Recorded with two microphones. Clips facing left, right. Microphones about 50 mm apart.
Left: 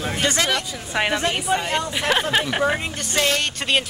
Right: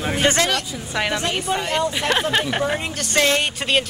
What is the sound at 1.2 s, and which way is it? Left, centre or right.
Speech, centre.